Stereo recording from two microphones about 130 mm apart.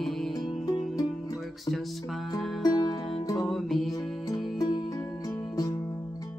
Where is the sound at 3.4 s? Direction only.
Centre (ahead or behind).